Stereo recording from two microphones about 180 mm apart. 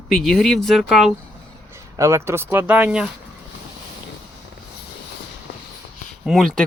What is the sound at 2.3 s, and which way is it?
Speech, 10° right (ahead or behind).